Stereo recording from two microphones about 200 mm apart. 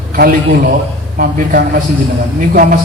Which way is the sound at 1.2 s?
45° right (ahead or behind).